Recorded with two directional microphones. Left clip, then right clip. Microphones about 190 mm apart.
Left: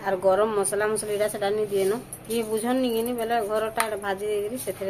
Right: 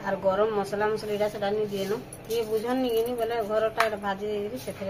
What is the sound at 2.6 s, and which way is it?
A woman's voice, 60° left (ahead or behind).